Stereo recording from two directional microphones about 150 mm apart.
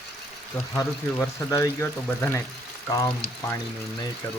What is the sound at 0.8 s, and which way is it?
Speech, 20° left (ahead or behind).